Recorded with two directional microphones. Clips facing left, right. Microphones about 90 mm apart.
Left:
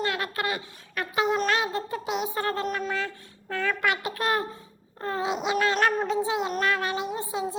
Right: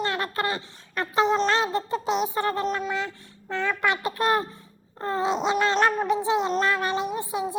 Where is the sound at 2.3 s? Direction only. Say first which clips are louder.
Right 3 dB; 20° right (ahead or behind).